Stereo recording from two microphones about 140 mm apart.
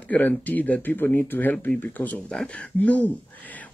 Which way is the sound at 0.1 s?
10° left (ahead or behind).